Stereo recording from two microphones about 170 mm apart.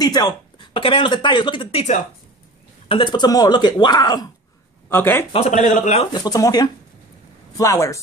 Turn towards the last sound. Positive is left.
turn(degrees=20)  # may be behind; listen again after turning